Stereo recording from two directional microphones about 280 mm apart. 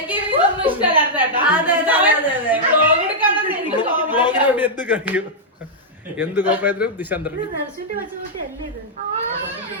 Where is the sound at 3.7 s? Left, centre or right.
Centre.